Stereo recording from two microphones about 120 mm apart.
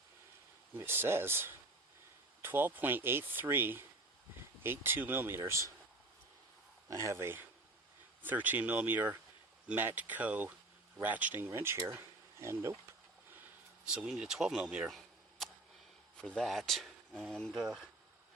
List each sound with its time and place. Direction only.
0.7 s speech: 20° right (ahead or behind)
6.8 s speech: 25° right (ahead or behind)
13.8 s speech: 5° right (ahead or behind)